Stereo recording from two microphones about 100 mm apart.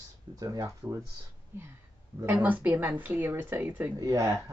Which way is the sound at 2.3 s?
15° right (ahead or behind).